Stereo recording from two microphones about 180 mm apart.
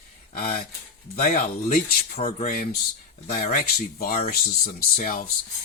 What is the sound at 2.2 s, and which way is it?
Speech, 40° left (ahead or behind).